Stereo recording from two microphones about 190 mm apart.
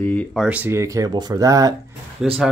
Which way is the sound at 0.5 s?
10° right (ahead or behind).